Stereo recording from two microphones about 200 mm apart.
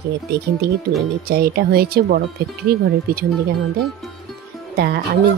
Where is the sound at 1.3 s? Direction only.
50° right (ahead or behind).